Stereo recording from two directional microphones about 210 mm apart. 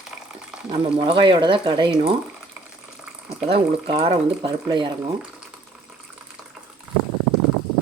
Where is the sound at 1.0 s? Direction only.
25° right (ahead or behind).